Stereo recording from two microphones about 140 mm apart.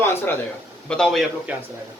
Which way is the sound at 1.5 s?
10° right (ahead or behind).